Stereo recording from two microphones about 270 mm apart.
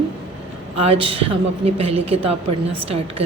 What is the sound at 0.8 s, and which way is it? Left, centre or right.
A woman's voice, right.